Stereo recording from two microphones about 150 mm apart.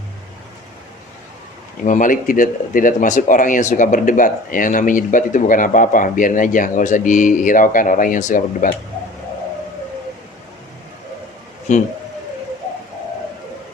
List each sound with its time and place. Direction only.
1.8 s speech: 55° left (ahead or behind)
11.7 s a man's voice: 50° left (ahead or behind)